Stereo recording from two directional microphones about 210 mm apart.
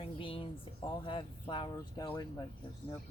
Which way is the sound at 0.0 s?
25° left (ahead or behind).